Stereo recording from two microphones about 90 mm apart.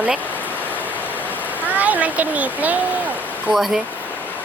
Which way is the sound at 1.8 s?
15° right (ahead or behind).